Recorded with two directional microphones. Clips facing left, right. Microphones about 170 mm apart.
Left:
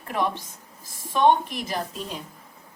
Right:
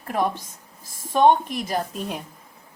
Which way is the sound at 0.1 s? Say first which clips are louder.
Right 2 dB; 40° right (ahead or behind).